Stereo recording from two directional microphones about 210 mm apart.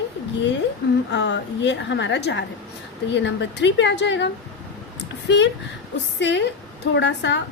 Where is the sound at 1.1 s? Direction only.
55° left (ahead or behind).